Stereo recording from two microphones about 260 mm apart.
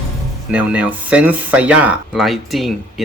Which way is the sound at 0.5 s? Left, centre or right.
Centre.